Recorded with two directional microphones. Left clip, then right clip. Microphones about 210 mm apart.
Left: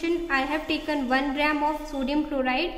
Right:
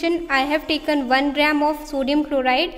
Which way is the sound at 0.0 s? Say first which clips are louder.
Right 5 dB; 50° right (ahead or behind).